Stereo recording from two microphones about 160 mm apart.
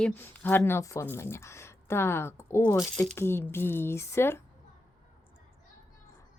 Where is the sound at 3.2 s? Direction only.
15° left (ahead or behind).